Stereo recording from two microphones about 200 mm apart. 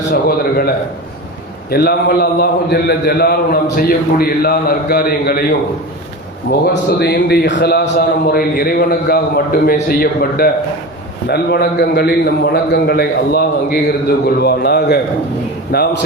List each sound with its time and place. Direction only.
0.1 s a man's voice: 50° left (ahead or behind)
1.7 s a man's voice: 50° left (ahead or behind)
6.5 s a man's voice: 55° left (ahead or behind)